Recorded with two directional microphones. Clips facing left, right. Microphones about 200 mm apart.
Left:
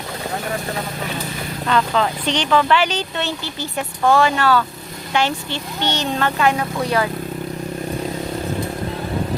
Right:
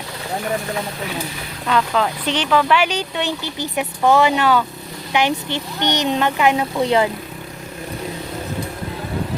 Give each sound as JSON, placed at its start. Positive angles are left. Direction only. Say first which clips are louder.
{"t": 1.6, "sound": "speech", "louder": "even", "side_deg": -5}